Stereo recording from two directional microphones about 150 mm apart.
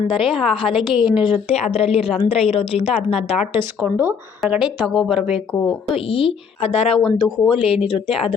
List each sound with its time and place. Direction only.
0.2 s a woman's voice: centre (ahead or behind)
1.5 s a woman's voice: 45° left (ahead or behind)
3.5 s speech: 10° right (ahead or behind)
5.9 s a woman's voice: 35° left (ahead or behind)